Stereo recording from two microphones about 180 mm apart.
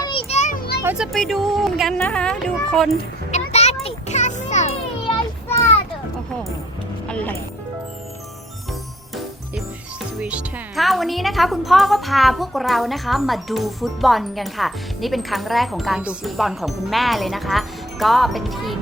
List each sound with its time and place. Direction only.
0.0 s children playing: 30° left (ahead or behind); by 0.8 s 55° left (ahead or behind)
0.9 s a woman's voice: centre (ahead or behind)
3.3 s a sound: 35° left (ahead or behind)
3.8 s children playing: 40° left (ahead or behind)
7.1 s music: 5° left (ahead or behind)
10.2 s a woman's voice: 5° right (ahead or behind)